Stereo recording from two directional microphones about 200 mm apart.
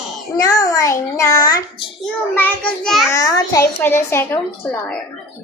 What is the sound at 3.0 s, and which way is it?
A child's voice, 15° left (ahead or behind).